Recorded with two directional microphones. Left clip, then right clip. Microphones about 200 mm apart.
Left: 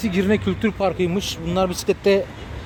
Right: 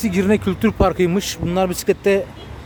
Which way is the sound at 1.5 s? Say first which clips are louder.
Right 2 dB; 20° right (ahead or behind).